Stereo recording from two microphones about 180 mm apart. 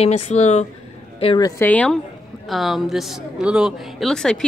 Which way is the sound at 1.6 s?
5° left (ahead or behind).